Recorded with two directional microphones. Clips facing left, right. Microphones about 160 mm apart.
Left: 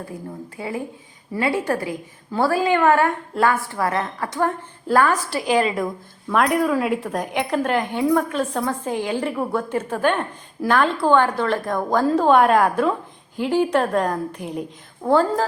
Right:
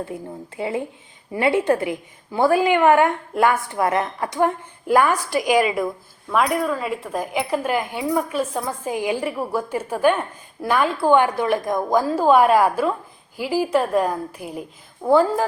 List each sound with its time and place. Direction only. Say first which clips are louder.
0.0 s a woman's voice: right 2 dB; 25° right (ahead or behind)
6.3 s a woman's voice: left 2 dB; centre (ahead or behind)